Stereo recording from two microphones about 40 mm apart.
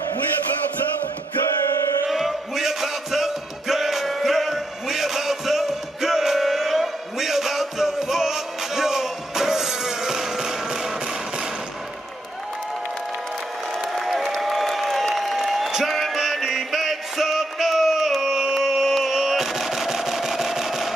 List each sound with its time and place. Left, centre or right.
2.0 s music: centre
13.9 s applause: centre
15.1 s a sound: centre